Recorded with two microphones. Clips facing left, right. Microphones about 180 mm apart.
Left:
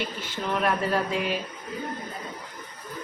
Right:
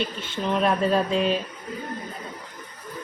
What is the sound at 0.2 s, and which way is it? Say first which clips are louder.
Speech: right 3 dB; 25° right (ahead or behind).